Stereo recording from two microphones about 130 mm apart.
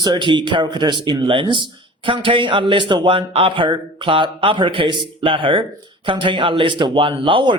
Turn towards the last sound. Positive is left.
turn(degrees=-40)  # may be behind; listen again after turning